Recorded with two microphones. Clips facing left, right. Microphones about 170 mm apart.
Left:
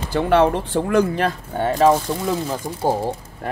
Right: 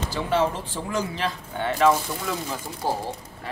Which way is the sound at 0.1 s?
60° left (ahead or behind).